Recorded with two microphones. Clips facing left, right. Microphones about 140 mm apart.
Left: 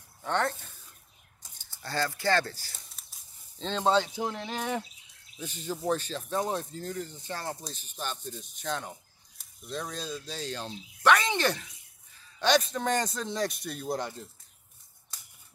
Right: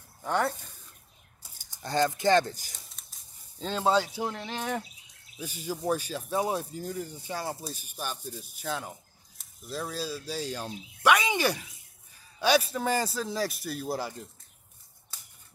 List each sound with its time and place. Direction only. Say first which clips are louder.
0.2 s speech: right 1 dB; 10° right (ahead or behind)
2.9 s a sound: right 1 dB; centre (ahead or behind)
4.6 s a man's voice: even; 5° left (ahead or behind)
5.4 s a man's voice: right 1 dB; 10° right (ahead or behind)